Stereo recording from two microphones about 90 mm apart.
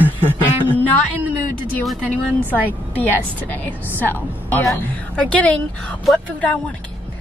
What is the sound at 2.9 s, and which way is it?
A woman's voice, 20° left (ahead or behind).